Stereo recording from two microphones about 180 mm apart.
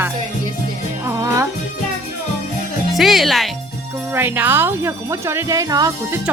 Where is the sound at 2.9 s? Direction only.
Centre (ahead or behind).